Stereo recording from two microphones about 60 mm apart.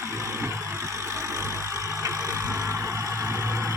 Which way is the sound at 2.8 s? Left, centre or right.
Right.